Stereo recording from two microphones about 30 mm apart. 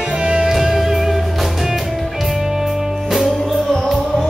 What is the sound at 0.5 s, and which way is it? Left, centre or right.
Music, centre.